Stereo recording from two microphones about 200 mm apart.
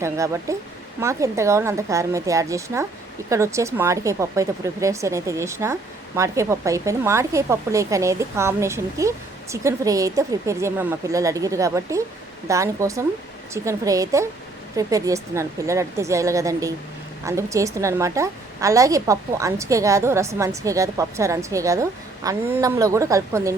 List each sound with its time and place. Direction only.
0.0 s speech: 15° right (ahead or behind)